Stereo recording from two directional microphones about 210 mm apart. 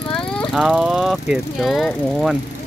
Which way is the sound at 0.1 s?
5° left (ahead or behind).